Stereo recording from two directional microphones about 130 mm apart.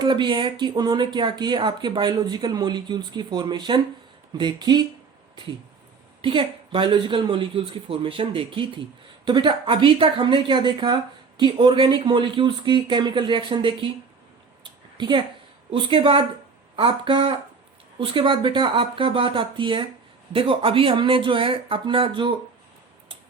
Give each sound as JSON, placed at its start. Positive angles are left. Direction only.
{"t": 0.0, "sound": "speech", "side_deg": -35}
{"t": 6.2, "sound": "speech", "side_deg": -40}
{"t": 14.6, "sound": "a sound", "side_deg": -35}
{"t": 15.7, "sound": "speech", "side_deg": -45}